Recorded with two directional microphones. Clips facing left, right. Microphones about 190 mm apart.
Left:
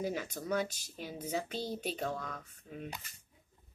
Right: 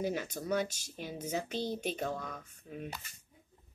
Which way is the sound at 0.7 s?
75° right (ahead or behind).